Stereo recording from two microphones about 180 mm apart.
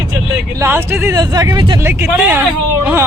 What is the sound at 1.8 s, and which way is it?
Speech, 10° right (ahead or behind).